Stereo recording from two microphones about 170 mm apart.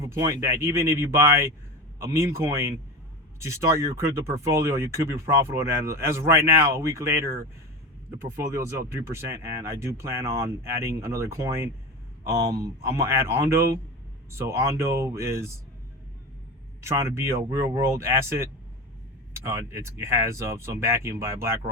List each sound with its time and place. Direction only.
0.0 s speech: 15° right (ahead or behind)
16.8 s speech: 15° right (ahead or behind)
19.5 s speech: 15° right (ahead or behind)